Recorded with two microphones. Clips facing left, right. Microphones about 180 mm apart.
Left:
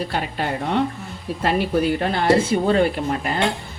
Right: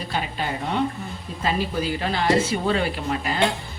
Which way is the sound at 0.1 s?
55° left (ahead or behind).